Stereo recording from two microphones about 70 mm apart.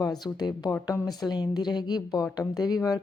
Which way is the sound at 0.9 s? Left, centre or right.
Left.